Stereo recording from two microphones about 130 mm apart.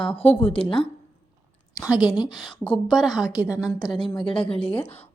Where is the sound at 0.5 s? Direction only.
45° left (ahead or behind).